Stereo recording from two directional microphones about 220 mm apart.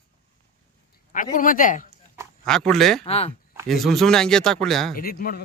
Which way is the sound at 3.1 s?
25° left (ahead or behind).